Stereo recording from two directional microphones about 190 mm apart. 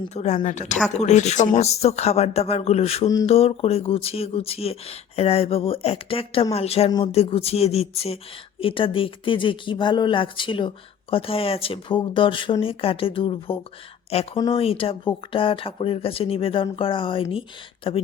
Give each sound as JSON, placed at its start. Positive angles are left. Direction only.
{"t": 0.0, "sound": "speech", "side_deg": 35}
{"t": 14.6, "sound": "speech", "side_deg": 30}